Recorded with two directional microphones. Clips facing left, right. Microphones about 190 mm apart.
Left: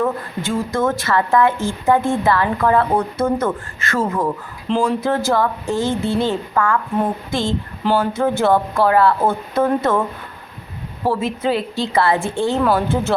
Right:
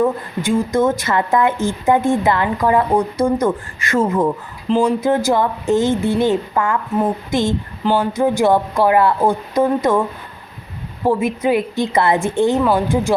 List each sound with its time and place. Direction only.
0.0 s a woman's voice: 15° right (ahead or behind)
4.7 s speech: centre (ahead or behind)
5.0 s a woman's voice: 20° right (ahead or behind)
11.0 s a woman's voice: 15° right (ahead or behind)
12.5 s speech: centre (ahead or behind)